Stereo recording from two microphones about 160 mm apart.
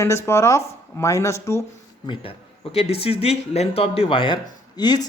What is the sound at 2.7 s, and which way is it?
Speech, 35° left (ahead or behind).